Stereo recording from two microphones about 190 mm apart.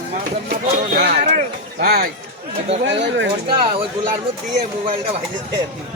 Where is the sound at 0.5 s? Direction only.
45° right (ahead or behind).